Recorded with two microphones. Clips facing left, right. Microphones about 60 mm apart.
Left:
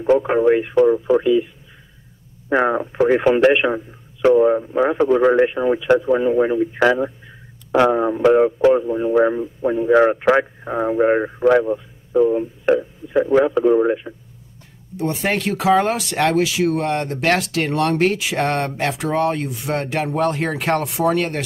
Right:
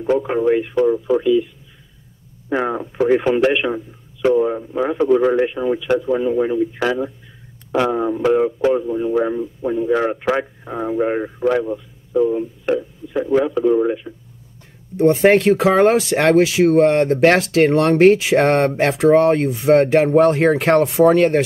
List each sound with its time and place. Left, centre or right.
0.0 s speech: left
2.5 s a man's voice: left
15.0 s speech: right